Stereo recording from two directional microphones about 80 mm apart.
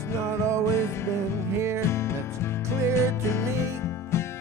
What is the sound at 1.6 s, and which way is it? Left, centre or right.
Music, right.